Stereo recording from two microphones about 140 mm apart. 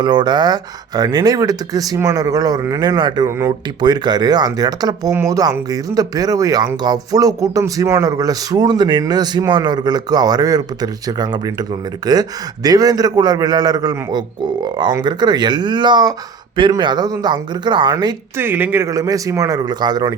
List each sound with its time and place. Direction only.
0.0 s speech: 30° right (ahead or behind)
18.3 s speech: 15° right (ahead or behind)